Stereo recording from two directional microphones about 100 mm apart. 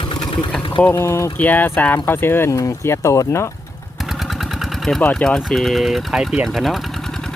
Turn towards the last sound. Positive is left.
turn(degrees=0)  # may be behind; listen again after turning